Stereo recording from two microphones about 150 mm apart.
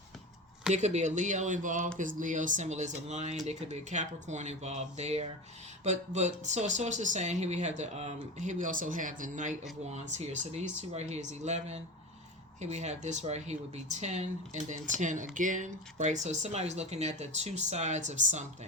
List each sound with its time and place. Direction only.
0.7 s speech: 50° right (ahead or behind)